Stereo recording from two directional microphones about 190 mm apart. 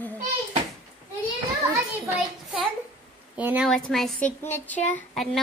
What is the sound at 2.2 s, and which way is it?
A woman's voice, 5° right (ahead or behind).